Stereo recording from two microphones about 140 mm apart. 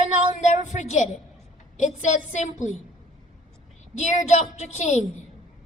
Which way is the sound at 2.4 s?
60° left (ahead or behind).